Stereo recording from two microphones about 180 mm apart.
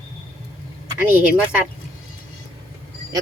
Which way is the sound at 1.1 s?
10° right (ahead or behind).